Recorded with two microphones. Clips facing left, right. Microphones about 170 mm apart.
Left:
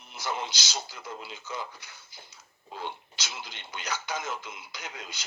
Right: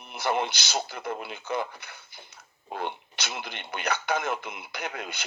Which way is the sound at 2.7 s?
60° right (ahead or behind).